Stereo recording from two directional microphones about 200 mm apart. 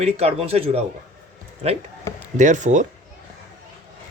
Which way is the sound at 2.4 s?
40° right (ahead or behind).